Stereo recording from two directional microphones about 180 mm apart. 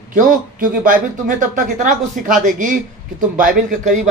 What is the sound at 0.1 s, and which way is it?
Speech, 50° right (ahead or behind).